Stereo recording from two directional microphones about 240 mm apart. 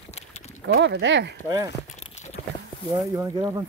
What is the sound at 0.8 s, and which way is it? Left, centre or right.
Speech, right.